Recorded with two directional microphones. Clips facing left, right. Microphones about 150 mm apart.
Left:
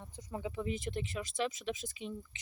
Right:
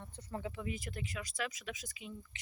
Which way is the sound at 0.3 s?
15° left (ahead or behind).